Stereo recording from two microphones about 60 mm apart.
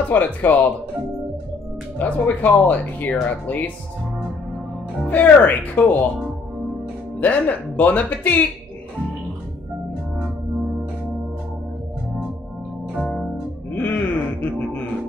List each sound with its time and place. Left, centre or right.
0.1 s speech: left
2.0 s speech: left
5.0 s speech: left
7.2 s speech: left
13.7 s music: left